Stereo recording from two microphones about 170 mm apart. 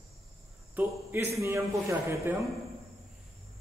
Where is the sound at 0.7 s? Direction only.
10° right (ahead or behind).